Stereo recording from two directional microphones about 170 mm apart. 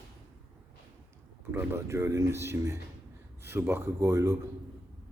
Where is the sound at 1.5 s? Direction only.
15° right (ahead or behind).